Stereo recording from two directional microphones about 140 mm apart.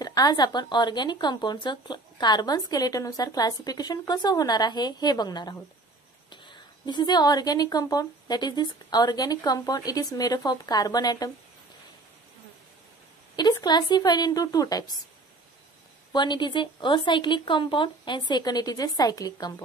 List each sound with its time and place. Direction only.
0.0 s speech: 30° left (ahead or behind)
13.4 s speech: 30° left (ahead or behind)
16.1 s speech: 35° left (ahead or behind)